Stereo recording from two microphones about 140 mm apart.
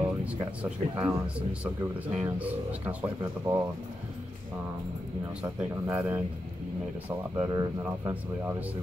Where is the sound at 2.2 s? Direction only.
15° right (ahead or behind).